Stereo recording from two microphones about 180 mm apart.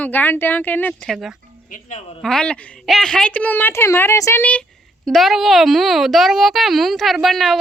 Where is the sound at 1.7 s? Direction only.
45° left (ahead or behind).